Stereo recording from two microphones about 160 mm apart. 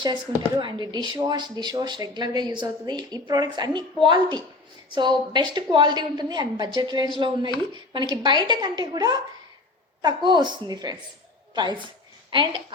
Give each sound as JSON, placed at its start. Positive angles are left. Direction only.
{"t": 0.6, "sound": "a woman's voice", "side_deg": -30}